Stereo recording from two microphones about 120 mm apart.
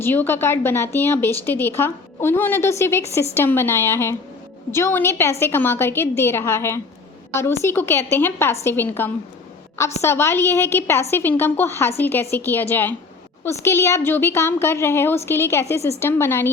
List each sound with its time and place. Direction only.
0.0 s a woman's voice: 15° left (ahead or behind)